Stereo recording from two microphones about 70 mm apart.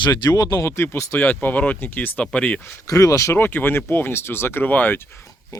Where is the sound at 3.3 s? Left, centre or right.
Left.